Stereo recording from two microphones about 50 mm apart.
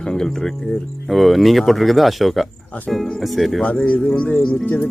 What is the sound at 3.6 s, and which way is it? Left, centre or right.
Speech, left.